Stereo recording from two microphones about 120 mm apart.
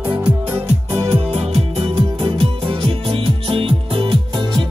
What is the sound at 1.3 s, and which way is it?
Music, 60° right (ahead or behind).